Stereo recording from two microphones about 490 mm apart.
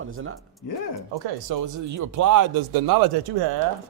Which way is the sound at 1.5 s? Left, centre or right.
Right.